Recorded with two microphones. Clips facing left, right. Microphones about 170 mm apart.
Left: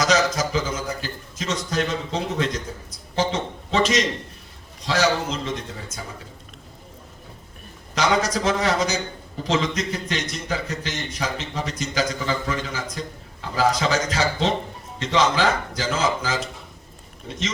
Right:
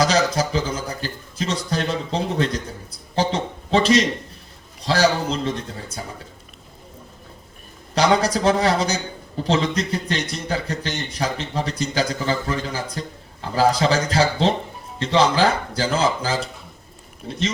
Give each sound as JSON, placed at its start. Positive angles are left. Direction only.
{"t": 0.3, "sound": "a man's voice", "side_deg": -30}
{"t": 7.9, "sound": "a man's voice", "side_deg": -35}